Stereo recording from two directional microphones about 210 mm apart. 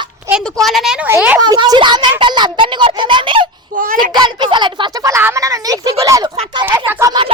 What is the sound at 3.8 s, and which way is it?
Speech, 40° right (ahead or behind).